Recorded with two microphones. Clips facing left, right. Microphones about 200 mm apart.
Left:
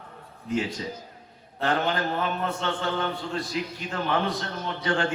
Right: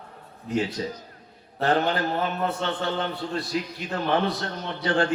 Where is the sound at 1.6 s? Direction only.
35° right (ahead or behind).